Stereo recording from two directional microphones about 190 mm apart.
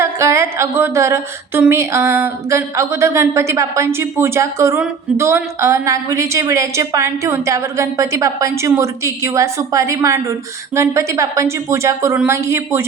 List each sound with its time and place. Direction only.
0.0 s speech: 15° right (ahead or behind)